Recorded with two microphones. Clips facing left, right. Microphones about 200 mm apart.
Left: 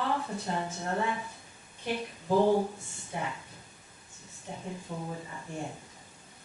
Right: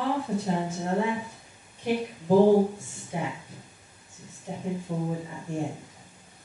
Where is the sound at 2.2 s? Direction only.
30° right (ahead or behind).